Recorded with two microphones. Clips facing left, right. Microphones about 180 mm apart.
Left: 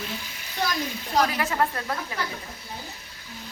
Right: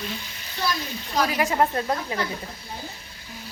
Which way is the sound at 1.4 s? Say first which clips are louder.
Right 4 dB; 20° right (ahead or behind).